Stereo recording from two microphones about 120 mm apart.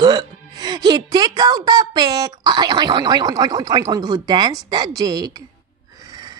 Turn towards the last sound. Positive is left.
turn(degrees=-30)  # may be behind; listen again after turning